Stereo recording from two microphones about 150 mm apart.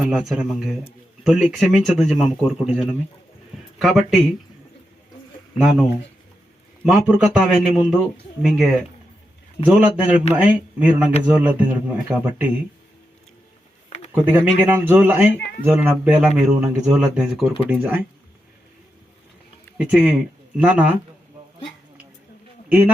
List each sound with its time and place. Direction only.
0.0 s a man's voice: centre (ahead or behind)
6.8 s a man's voice: 5° right (ahead or behind)
13.9 s a sound: 45° left (ahead or behind)
14.3 s speech: 15° right (ahead or behind)
19.8 s speech: 10° right (ahead or behind)